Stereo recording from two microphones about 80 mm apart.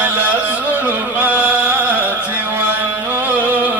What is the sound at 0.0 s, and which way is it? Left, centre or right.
Music, right.